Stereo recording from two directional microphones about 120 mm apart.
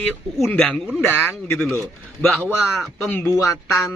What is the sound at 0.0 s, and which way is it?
Speech, 10° left (ahead or behind).